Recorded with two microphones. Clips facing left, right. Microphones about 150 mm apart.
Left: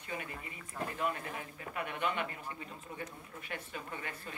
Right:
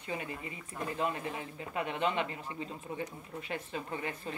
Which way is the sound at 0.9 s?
25° right (ahead or behind).